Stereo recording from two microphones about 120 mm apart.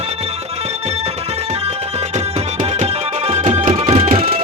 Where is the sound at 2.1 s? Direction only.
70° right (ahead or behind).